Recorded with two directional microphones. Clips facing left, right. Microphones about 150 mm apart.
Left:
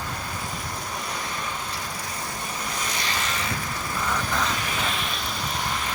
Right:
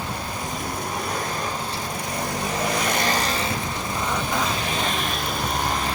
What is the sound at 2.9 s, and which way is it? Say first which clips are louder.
Vehicle: right 7 dB; 50° right (ahead or behind).